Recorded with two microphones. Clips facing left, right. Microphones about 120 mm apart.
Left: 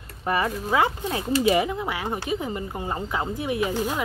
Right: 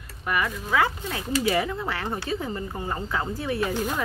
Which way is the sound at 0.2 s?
30° left (ahead or behind).